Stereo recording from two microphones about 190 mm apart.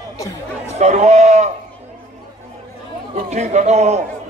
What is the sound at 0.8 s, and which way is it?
Speech, 40° right (ahead or behind).